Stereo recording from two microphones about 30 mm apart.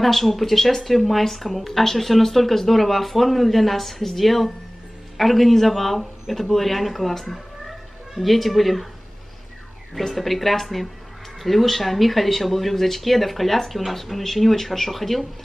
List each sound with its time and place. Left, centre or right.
0.0 s speech: centre
7.6 s cat: centre
9.9 s speech: centre